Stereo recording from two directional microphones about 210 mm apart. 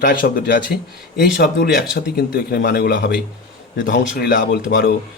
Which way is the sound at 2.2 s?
50° left (ahead or behind).